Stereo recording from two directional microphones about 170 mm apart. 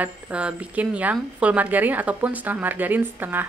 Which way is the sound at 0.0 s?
5° right (ahead or behind).